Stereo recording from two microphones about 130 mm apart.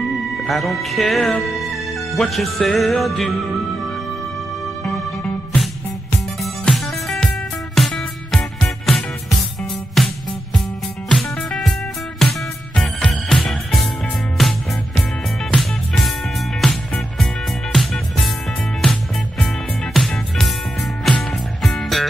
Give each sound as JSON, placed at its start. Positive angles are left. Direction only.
{"t": 0.4, "sound": "speech", "side_deg": 0}
{"t": 4.8, "sound": "music", "side_deg": 10}
{"t": 16.6, "sound": "music", "side_deg": 5}